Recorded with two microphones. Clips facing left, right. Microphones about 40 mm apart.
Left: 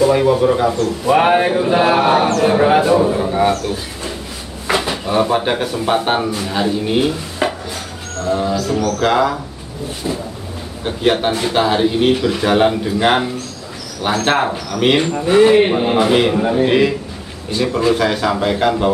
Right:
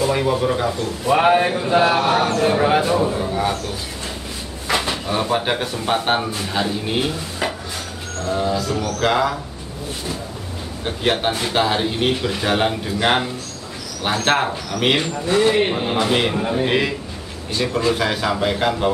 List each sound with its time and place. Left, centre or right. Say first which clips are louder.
0.0 s a man's voice: left 6 dB; centre
3.3 s speech: left 6 dB; left
4.6 s speech: left 3 dB; centre
7.4 s a sound: left 5 dB; centre
9.0 s speech: left 2 dB; centre
15.1 s a man's voice: left 9 dB; left; by 18.9 s centre